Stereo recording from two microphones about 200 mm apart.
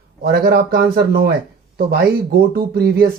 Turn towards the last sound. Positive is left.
turn(degrees=-50)  # may be behind; listen again after turning